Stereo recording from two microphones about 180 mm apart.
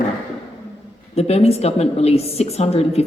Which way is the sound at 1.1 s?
35° left (ahead or behind).